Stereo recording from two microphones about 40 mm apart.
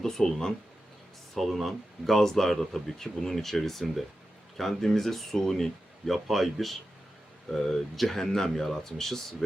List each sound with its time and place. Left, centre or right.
0.0 s speech: centre
1.4 s speech: centre
6.2 s speech: centre